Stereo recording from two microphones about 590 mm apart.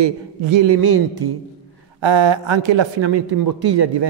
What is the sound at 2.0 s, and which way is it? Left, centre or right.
Speech, right.